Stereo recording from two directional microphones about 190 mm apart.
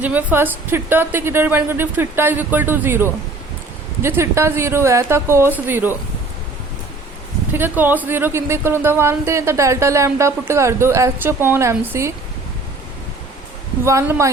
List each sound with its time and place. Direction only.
0.0 s speech: 10° right (ahead or behind)
7.5 s speech: 10° right (ahead or behind)
13.8 s speech: 15° right (ahead or behind)